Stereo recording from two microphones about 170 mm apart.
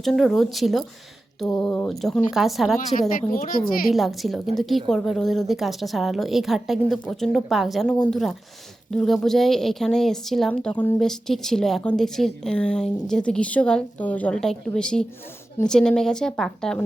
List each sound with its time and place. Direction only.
0.0 s a woman's voice: centre (ahead or behind)
3.2 s speech: 55° left (ahead or behind)
3.9 s a woman's voice: centre (ahead or behind)